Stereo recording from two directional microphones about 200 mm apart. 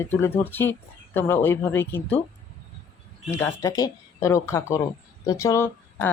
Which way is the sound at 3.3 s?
15° left (ahead or behind).